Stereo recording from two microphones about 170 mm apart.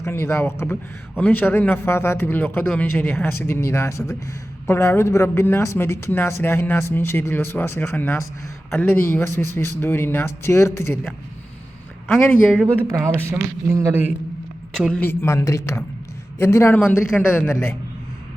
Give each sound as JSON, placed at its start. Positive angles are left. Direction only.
{"t": 0.0, "sound": "a man's voice", "side_deg": 15}
{"t": 12.0, "sound": "speech", "side_deg": 0}
{"t": 12.6, "sound": "speech", "side_deg": -15}
{"t": 14.7, "sound": "a man's voice", "side_deg": 5}